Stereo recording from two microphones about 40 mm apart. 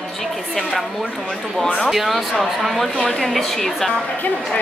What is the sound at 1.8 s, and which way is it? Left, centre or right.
A woman's voice, centre.